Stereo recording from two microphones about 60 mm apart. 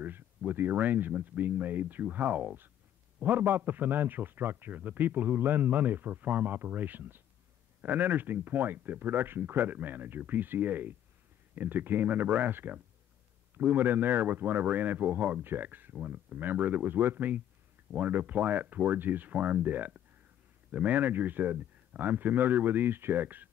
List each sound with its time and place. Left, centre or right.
0.5 s a man's voice: right